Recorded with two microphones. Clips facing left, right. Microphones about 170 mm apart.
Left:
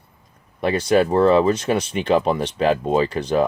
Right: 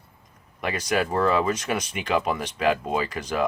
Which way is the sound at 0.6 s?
30° left (ahead or behind).